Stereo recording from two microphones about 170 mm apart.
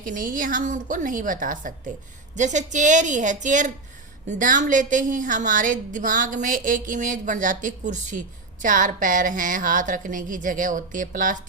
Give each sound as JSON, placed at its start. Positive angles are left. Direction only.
{"t": 0.0, "sound": "a woman's voice", "side_deg": -50}